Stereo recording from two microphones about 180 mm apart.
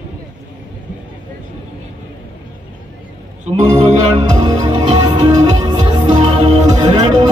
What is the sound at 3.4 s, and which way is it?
Music, 40° right (ahead or behind).